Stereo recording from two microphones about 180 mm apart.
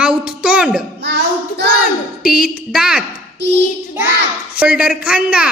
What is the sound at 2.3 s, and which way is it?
Speech, 5° right (ahead or behind).